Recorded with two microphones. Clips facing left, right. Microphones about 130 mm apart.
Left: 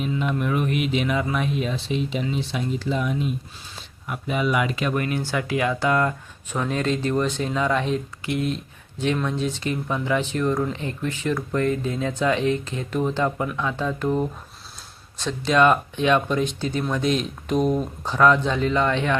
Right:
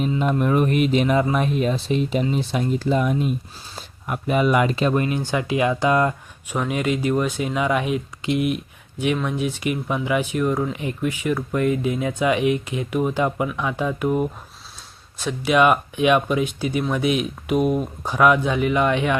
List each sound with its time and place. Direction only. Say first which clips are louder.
0.2 s speech: right 6 dB; 40° right (ahead or behind)
4.7 s speech: right 4 dB; 30° right (ahead or behind); by 19.1 s 15° right (ahead or behind)